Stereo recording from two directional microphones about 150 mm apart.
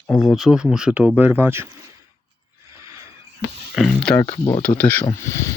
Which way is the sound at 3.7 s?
Centre (ahead or behind).